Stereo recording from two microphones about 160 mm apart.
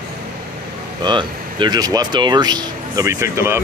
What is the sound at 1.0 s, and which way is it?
Speech, 30° right (ahead or behind).